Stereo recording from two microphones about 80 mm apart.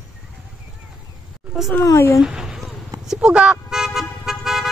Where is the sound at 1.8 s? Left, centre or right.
Left.